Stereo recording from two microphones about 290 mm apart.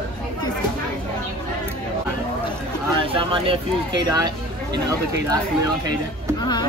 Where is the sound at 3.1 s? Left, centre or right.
Centre.